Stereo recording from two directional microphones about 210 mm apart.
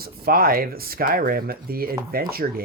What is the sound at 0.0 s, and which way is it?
Speech, 45° right (ahead or behind).